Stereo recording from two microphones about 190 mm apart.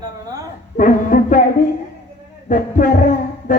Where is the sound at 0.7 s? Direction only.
45° left (ahead or behind).